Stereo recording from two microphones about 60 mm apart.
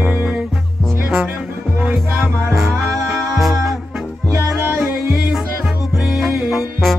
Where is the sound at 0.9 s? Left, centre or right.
Right.